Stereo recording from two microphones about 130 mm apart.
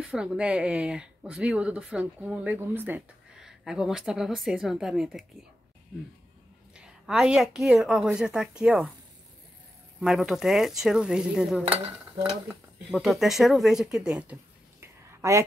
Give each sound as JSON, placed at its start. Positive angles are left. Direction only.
{"t": 0.0, "sound": "speech", "side_deg": -5}
{"t": 3.3, "sound": "speech", "side_deg": -5}
{"t": 6.7, "sound": "speech", "side_deg": -5}
{"t": 9.9, "sound": "speech", "side_deg": -5}
{"t": 14.8, "sound": "a sound", "side_deg": -20}